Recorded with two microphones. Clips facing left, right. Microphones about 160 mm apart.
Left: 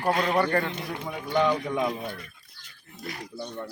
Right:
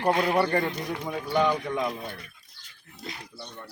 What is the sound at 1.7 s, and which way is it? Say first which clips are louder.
Speech: left 2 dB; 10° left (ahead or behind).